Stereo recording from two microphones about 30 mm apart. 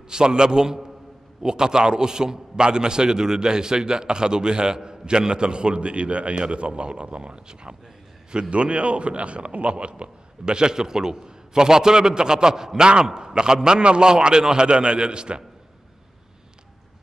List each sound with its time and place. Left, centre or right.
0.1 s a man's voice: right